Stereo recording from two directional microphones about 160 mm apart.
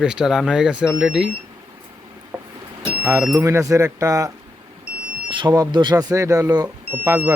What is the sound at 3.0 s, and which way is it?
Speech, 15° right (ahead or behind).